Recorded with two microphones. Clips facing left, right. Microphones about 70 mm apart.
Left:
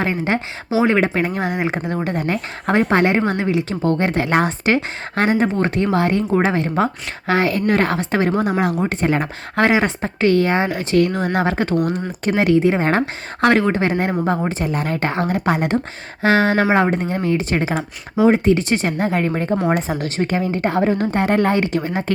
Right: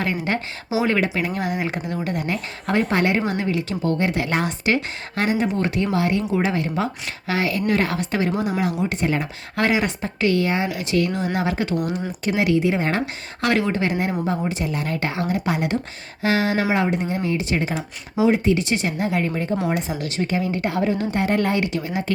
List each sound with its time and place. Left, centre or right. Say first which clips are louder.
0.0 s a woman's voice: left 4 dB; left